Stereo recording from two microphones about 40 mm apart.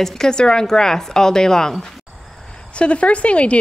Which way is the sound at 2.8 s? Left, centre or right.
Left.